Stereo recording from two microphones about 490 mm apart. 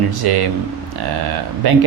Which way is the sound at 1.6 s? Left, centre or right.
Right.